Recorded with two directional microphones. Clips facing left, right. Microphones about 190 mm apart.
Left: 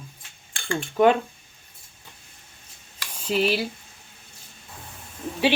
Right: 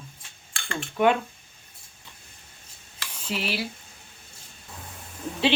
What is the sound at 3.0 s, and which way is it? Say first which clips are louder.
Stir: left 8 dB; 40° left (ahead or behind).